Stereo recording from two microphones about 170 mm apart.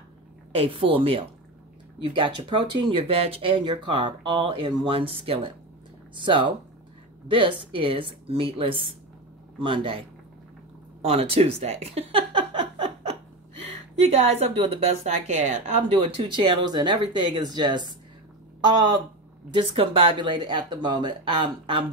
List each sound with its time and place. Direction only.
0.7 s a woman's voice: 30° right (ahead or behind)
11.1 s a sound: 35° right (ahead or behind)
14.0 s a woman's voice: 40° right (ahead or behind)